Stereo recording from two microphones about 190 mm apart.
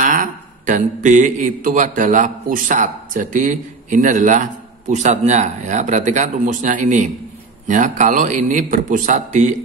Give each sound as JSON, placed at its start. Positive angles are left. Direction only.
{"t": 0.0, "sound": "a man's voice", "side_deg": -45}